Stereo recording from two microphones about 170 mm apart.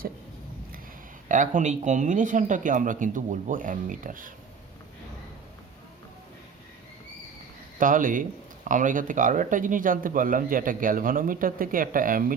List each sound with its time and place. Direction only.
1.3 s speech: 50° right (ahead or behind)
7.8 s speech: 50° right (ahead or behind)